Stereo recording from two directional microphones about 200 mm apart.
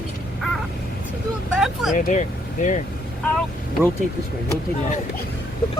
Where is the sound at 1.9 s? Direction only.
40° left (ahead or behind).